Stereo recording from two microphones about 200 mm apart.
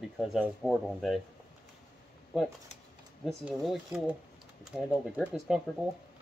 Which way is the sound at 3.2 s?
Centre (ahead or behind).